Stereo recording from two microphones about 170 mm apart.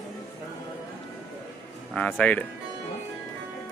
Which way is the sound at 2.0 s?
5° left (ahead or behind).